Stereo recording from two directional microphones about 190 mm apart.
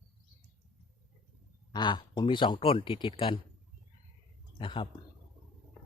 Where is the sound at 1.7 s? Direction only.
25° left (ahead or behind).